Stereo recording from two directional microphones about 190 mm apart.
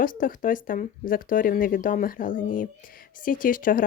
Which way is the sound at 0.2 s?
45° left (ahead or behind).